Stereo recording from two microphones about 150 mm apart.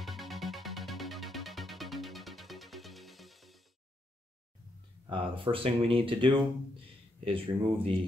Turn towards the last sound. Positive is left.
turn(degrees=-35)  # may be behind; listen again after turning